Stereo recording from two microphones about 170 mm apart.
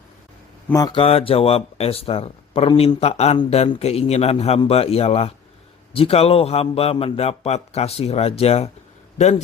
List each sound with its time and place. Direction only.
0.7 s a man's voice: 25° left (ahead or behind); by 9.4 s 40° left (ahead or behind)